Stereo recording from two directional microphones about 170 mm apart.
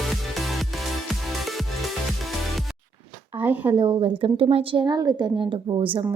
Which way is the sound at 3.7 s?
30° right (ahead or behind).